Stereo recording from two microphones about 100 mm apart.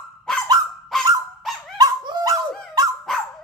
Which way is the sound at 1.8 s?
45° right (ahead or behind).